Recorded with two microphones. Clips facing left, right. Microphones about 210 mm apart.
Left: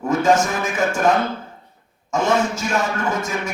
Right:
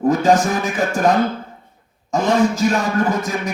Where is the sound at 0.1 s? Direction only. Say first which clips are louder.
Right 1 dB; 35° right (ahead or behind).